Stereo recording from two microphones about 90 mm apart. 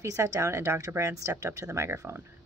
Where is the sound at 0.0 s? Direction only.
35° right (ahead or behind).